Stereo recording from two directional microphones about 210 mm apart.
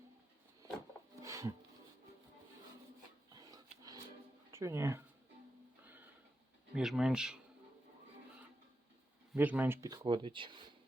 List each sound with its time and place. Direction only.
1.2 s filing: 15° right (ahead or behind)
3.2 s a sound: 20° right (ahead or behind)
4.5 s speech: 10° right (ahead or behind)
5.8 s a sound: 10° right (ahead or behind)
6.7 s speech: centre (ahead or behind)
9.3 s speech: 5° right (ahead or behind); by 10.6 s 25° right (ahead or behind)